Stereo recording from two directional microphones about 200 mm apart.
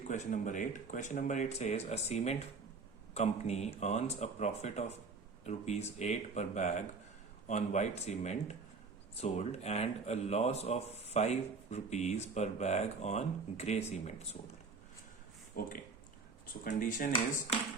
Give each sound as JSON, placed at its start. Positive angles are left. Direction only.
{"t": 0.1, "sound": "speech", "side_deg": 40}
{"t": 15.6, "sound": "speech", "side_deg": 50}